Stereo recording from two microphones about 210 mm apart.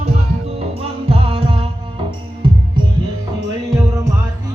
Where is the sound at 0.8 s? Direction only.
30° right (ahead or behind).